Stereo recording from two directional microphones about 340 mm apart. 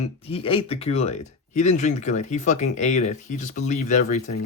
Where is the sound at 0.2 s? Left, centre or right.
Centre.